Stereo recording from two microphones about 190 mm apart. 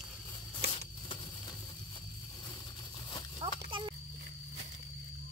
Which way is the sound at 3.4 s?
30° right (ahead or behind).